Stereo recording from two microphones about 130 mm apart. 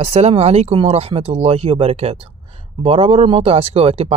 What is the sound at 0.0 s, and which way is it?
Speech, 55° right (ahead or behind).